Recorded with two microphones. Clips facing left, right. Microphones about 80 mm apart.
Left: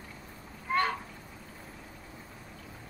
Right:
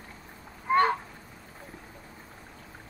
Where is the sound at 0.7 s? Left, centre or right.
Right.